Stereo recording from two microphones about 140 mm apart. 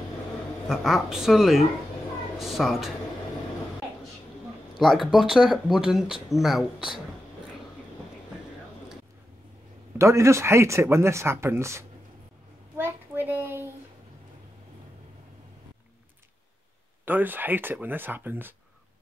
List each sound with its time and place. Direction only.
0.7 s speech: centre (ahead or behind)
4.7 s speech: centre (ahead or behind)
9.9 s speech: 20° right (ahead or behind)
12.7 s a sound: 15° right (ahead or behind)
17.0 s speech: 15° right (ahead or behind)